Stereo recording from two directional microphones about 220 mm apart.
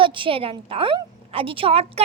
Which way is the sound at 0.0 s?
25° right (ahead or behind).